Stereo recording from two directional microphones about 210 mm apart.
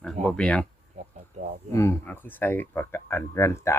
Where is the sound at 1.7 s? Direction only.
15° left (ahead or behind).